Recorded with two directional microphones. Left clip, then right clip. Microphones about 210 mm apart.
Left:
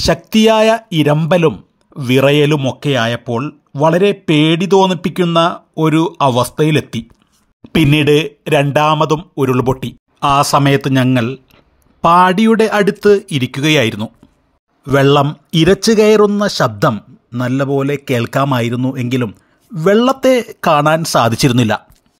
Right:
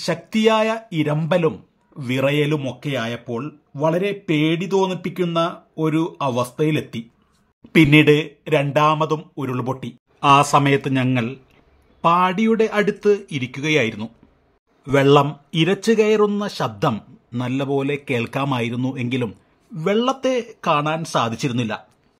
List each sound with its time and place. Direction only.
0.0 s speech: 30° left (ahead or behind)